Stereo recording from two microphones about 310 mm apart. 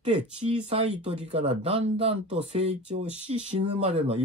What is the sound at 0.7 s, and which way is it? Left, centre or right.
Speech, centre.